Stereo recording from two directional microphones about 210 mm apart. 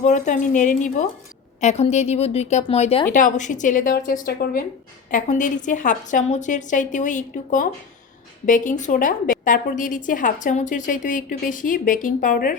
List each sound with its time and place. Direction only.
0.0 s a woman's voice: 35° left (ahead or behind)